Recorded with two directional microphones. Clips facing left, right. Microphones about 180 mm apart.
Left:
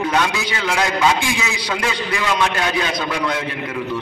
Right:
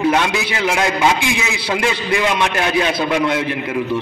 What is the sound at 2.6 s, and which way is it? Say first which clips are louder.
Speech: right 4 dB; 25° right (ahead or behind).